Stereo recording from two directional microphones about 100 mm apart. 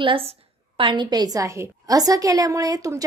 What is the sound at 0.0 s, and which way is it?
A woman's voice, 60° right (ahead or behind).